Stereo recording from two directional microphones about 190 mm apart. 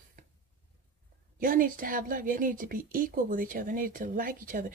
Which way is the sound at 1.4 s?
45° right (ahead or behind).